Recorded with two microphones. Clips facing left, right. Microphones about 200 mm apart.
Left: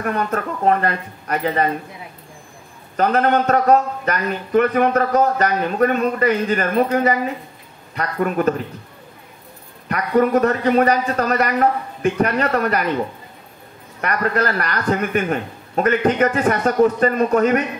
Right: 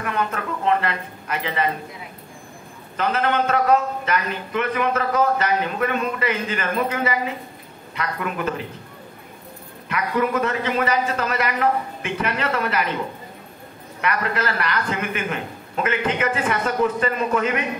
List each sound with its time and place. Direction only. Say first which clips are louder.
0.0 s a man's voice: left 4 dB; 40° left (ahead or behind)
3.0 s a man's voice: left 5 dB; 40° left (ahead or behind)
9.8 s a man's voice: left 5 dB; 40° left (ahead or behind)
14.0 s a man's voice: left 4 dB; 40° left (ahead or behind)